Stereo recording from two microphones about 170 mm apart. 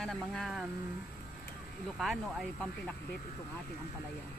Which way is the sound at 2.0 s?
Centre (ahead or behind).